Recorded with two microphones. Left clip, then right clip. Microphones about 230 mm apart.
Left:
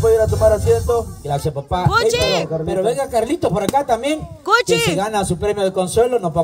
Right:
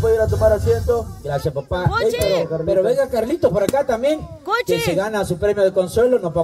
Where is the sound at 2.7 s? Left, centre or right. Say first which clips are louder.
Right 4 dB; left.